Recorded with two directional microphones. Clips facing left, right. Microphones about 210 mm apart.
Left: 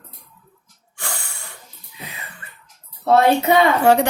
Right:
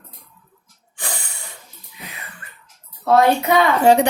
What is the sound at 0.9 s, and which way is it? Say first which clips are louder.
Snort: right 1 dB; 15° right (ahead or behind).